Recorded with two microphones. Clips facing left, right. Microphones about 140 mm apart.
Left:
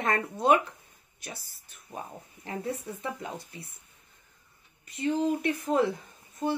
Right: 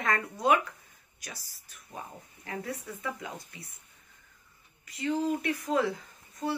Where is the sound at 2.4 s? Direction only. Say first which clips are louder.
Left 3 dB; 25° left (ahead or behind).